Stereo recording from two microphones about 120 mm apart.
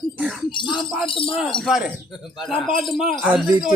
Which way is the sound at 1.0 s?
45° left (ahead or behind).